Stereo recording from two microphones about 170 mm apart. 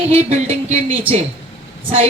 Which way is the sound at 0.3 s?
40° right (ahead or behind).